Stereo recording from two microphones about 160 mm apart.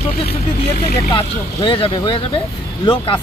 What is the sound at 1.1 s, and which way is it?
Speech, 30° left (ahead or behind).